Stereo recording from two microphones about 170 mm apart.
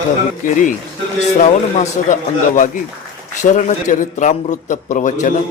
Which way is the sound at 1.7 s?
45° left (ahead or behind).